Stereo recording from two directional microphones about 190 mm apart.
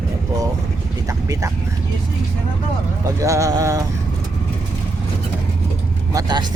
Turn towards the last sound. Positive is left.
turn(degrees=-20)  # may be behind; listen again after turning